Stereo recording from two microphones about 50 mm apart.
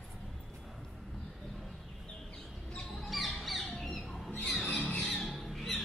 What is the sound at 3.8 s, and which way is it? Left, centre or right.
Owl, centre.